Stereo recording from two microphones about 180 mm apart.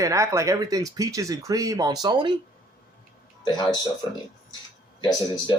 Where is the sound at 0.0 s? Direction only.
20° right (ahead or behind).